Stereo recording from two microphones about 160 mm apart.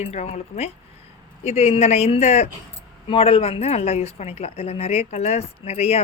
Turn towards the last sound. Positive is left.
turn(degrees=40)  # may be behind; listen again after turning